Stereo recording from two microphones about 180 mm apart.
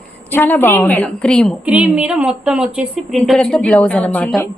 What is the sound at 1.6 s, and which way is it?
Speech, 5° right (ahead or behind).